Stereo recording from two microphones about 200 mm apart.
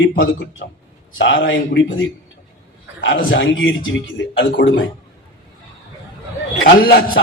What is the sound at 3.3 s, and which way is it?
Speech, 65° left (ahead or behind).